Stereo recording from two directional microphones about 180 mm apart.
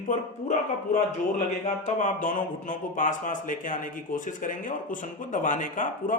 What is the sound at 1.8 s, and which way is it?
Speech, 45° left (ahead or behind).